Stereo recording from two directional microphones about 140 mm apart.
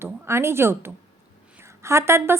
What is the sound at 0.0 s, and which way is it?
A woman's voice, 20° right (ahead or behind).